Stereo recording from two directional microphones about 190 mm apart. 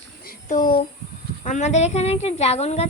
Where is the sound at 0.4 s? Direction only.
45° left (ahead or behind).